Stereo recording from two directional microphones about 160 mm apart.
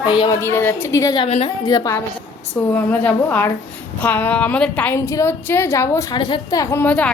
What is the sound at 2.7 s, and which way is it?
A woman's voice, 10° left (ahead or behind).